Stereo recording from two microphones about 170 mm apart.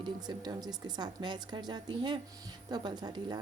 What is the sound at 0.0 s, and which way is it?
A woman's voice, 25° right (ahead or behind).